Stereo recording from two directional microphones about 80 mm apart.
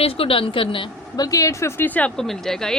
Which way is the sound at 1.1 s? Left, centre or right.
Left.